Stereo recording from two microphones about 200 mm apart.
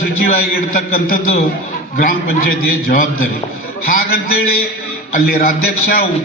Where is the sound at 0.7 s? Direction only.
45° left (ahead or behind).